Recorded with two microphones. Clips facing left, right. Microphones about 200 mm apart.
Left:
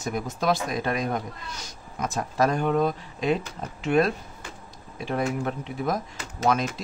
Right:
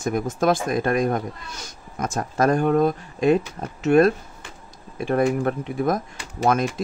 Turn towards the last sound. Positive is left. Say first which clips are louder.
# right 3 dB
turn(degrees=-45)  # may be behind; listen again after turning